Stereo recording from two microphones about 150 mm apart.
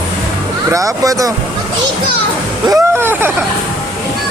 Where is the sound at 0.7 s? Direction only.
20° right (ahead or behind).